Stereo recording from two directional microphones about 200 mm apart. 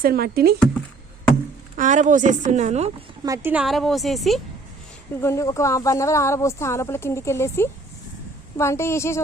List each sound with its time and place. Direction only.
0.0 s speech: 50° right (ahead or behind)
1.7 s a woman's voice: 40° right (ahead or behind)
3.2 s a woman's voice: 15° right (ahead or behind)
5.2 s speech: 15° left (ahead or behind)